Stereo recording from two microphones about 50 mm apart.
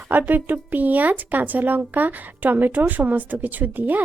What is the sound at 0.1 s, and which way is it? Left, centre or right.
Speech, right.